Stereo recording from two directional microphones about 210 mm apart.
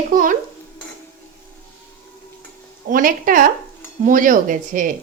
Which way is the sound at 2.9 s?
40° right (ahead or behind).